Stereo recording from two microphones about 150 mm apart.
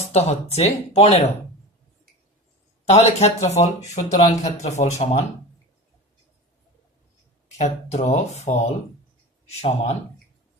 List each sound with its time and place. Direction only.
0.1 s speech: 45° left (ahead or behind)
2.8 s speech: 45° left (ahead or behind)
7.6 s speech: 45° left (ahead or behind)